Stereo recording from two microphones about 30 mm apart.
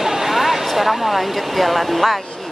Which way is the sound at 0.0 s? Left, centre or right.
Centre.